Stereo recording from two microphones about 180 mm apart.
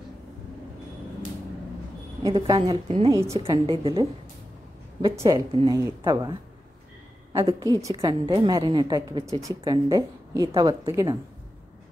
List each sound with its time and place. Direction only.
2.2 s a woman's voice: 20° right (ahead or behind)
5.1 s a woman's voice: 20° right (ahead or behind)
7.3 s a woman's voice: 25° right (ahead or behind)